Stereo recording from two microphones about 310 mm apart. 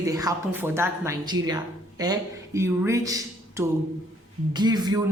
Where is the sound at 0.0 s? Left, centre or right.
Centre.